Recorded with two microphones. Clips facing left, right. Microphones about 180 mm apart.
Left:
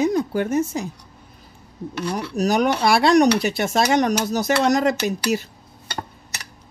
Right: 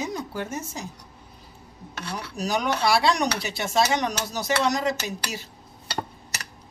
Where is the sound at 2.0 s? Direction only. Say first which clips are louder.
Left 8 dB; 45° left (ahead or behind).